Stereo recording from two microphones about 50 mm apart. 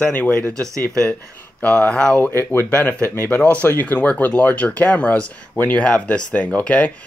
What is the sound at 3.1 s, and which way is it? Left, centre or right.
Speech, left.